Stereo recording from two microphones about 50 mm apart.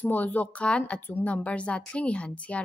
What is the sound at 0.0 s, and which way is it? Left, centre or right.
Speech, left.